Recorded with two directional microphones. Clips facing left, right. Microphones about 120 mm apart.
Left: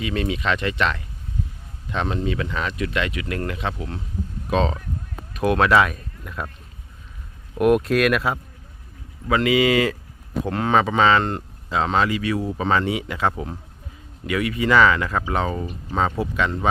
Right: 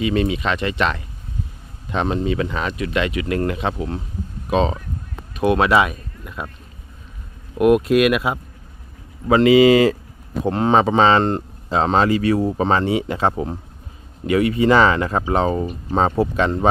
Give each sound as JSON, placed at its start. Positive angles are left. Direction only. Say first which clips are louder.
{"t": 0.0, "sound": "speech", "louder": "right 5 dB", "side_deg": -10}
{"t": 2.0, "sound": "speech", "louder": "right 5 dB", "side_deg": -10}
{"t": 7.6, "sound": "speech", "louder": "right 3 dB", "side_deg": -5}
{"t": 9.2, "sound": "speech", "louder": "right 7 dB", "side_deg": -30}